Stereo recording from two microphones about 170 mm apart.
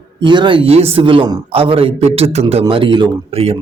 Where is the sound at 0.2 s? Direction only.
25° right (ahead or behind).